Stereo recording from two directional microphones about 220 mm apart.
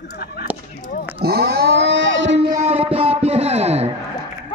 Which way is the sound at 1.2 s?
45° right (ahead or behind).